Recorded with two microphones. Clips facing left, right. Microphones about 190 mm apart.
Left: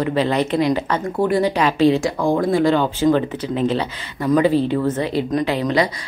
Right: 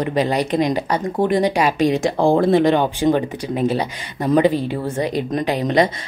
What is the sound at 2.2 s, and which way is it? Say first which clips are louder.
A woman's voice: right 3 dB; 30° right (ahead or behind).